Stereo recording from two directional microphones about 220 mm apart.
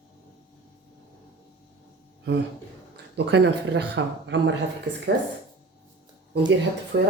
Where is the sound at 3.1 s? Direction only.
50° right (ahead or behind).